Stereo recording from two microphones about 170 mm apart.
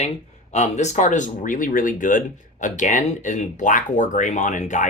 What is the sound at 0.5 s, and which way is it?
Speech, 40° left (ahead or behind).